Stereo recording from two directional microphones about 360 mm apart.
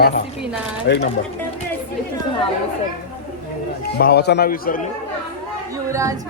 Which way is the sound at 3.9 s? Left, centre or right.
Left.